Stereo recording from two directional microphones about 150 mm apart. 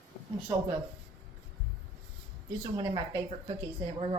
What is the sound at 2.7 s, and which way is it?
A woman's voice, 35° right (ahead or behind).